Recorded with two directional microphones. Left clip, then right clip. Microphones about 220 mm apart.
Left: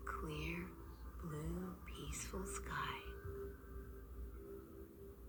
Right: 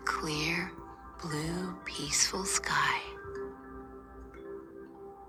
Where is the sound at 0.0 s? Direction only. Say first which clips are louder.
Right 14 dB; 55° right (ahead or behind).